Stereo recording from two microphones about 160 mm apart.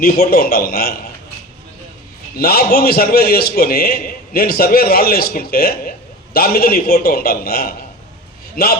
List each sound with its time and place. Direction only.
0.0 s a man's voice: 65° left (ahead or behind)
2.4 s a man's voice: 70° left (ahead or behind)